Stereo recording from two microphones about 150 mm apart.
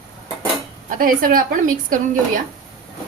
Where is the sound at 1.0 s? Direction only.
70° right (ahead or behind).